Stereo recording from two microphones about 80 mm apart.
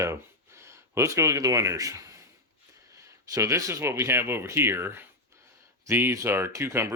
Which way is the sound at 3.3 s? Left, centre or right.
Right.